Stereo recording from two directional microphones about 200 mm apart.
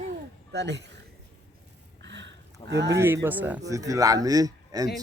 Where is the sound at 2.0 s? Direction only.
60° right (ahead or behind).